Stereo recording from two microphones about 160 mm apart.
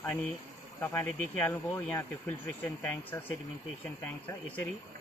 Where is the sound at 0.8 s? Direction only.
10° left (ahead or behind).